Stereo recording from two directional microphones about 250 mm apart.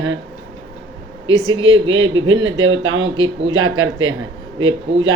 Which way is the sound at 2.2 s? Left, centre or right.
Right.